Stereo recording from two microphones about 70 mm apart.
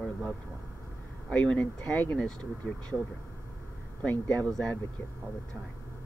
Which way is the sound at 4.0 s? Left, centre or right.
Centre.